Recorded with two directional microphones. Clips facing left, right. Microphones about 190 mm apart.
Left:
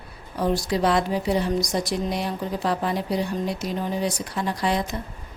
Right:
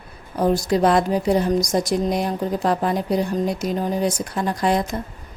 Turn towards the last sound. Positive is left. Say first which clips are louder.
# right 4 dB
turn(degrees=-50)  # may be behind; listen again after turning